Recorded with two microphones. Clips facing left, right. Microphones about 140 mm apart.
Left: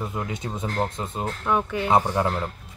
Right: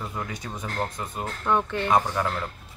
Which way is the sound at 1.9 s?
25° left (ahead or behind).